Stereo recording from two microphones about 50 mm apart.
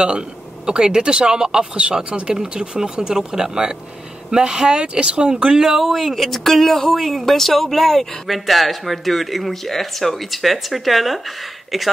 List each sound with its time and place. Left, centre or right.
0.7 s speech: centre